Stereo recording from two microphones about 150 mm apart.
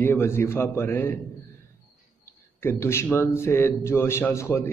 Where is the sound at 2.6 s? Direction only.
15° left (ahead or behind).